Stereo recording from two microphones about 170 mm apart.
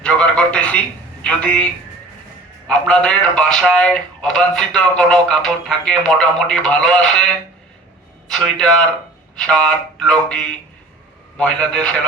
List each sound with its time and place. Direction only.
0.0 s a sound: 5° left (ahead or behind)
1.2 s a man's voice: 5° left (ahead or behind)
8.3 s a man's voice: 5° left (ahead or behind)